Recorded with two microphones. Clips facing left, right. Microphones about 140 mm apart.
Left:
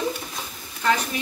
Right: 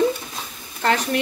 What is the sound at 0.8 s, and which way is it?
Speech, 70° right (ahead or behind).